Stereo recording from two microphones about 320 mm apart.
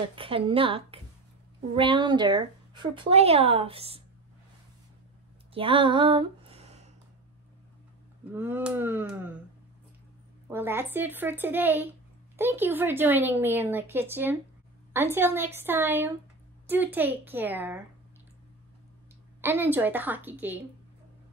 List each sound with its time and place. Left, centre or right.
0.1 s speech: centre
5.5 s a sound: centre
8.3 s a woman's voice: centre
10.5 s a woman's voice: centre
19.4 s a woman's voice: centre